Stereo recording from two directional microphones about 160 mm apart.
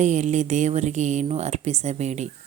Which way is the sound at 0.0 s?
45° right (ahead or behind).